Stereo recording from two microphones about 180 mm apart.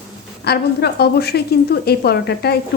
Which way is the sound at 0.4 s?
65° left (ahead or behind).